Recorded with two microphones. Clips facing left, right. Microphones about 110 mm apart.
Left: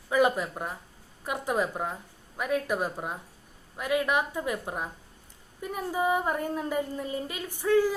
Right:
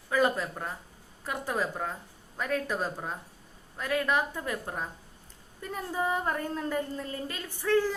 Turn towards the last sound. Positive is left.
turn(degrees=15)  # may be behind; listen again after turning